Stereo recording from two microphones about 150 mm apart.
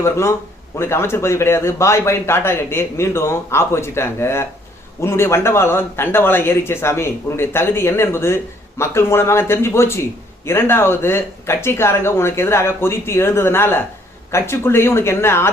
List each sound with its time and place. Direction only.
0.0 s a man's voice: 20° left (ahead or behind)